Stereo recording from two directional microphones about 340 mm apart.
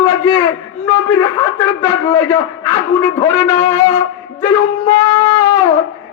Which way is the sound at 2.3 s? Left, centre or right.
Centre.